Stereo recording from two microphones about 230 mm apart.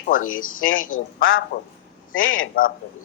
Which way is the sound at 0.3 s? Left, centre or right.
Left.